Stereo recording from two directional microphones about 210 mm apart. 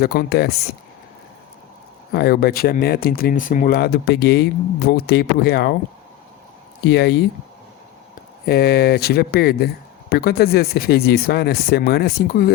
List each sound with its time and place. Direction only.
0.0 s speech: 50° left (ahead or behind)
2.1 s speech: 50° left (ahead or behind)
6.8 s speech: 50° left (ahead or behind)
8.4 s speech: 50° left (ahead or behind)